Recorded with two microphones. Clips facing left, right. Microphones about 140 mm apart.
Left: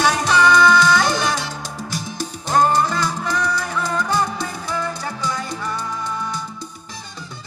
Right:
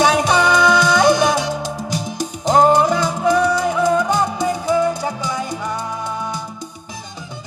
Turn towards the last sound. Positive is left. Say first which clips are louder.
# right 2 dB
turn(degrees=-20)  # may be behind; listen again after turning